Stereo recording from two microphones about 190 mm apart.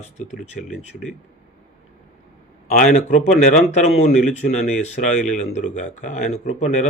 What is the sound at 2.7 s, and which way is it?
Speech, 40° left (ahead or behind).